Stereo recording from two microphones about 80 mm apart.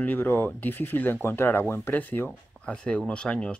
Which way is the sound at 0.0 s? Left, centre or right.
Left.